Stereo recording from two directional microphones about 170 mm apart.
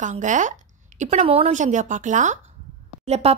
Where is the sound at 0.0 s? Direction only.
45° right (ahead or behind).